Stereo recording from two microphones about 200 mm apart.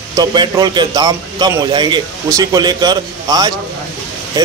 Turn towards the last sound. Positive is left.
turn(degrees=-20)  # may be behind; listen again after turning